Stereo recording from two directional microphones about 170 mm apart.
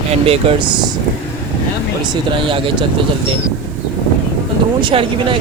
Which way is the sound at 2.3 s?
30° right (ahead or behind).